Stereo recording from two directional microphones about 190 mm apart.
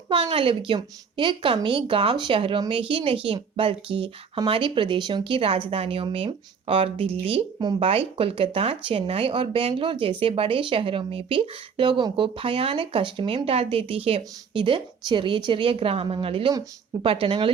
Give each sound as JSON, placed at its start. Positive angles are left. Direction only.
{"t": 0.1, "sound": "a woman's voice", "side_deg": -30}